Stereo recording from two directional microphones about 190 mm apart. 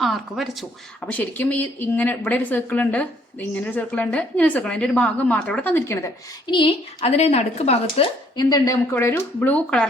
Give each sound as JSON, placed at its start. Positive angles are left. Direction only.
{"t": 0.0, "sound": "a woman's voice", "side_deg": 0}
{"t": 6.5, "sound": "speech", "side_deg": 25}